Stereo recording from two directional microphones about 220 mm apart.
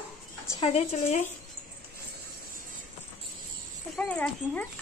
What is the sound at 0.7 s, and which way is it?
Speech, 30° left (ahead or behind).